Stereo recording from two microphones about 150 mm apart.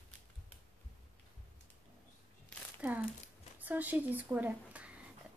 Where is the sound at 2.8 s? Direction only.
10° right (ahead or behind).